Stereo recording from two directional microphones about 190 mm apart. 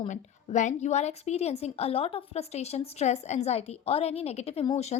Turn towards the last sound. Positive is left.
turn(degrees=35)  # may be behind; listen again after turning